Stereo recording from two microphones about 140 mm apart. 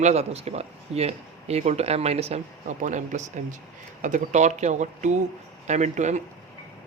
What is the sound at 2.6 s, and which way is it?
Speech, 65° right (ahead or behind).